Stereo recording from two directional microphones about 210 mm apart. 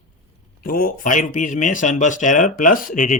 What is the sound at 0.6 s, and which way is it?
Speech, 45° left (ahead or behind).